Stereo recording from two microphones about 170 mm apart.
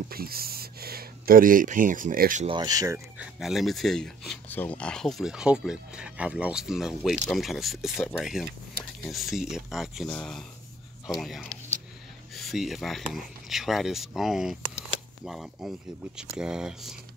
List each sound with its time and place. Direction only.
0.1 s speech: 60° right (ahead or behind)
2.4 s speech: 25° right (ahead or behind)
3.2 s speech: centre (ahead or behind)